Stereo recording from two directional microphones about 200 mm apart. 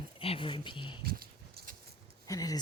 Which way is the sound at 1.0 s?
50° right (ahead or behind).